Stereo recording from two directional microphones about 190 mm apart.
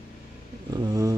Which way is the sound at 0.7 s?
20° right (ahead or behind).